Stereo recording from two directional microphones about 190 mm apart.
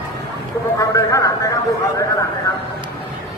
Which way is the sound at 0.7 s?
15° left (ahead or behind).